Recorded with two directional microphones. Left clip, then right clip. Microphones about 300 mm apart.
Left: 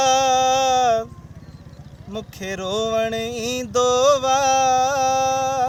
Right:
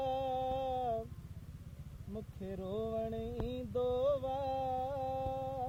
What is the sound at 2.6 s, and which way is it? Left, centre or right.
Music, left.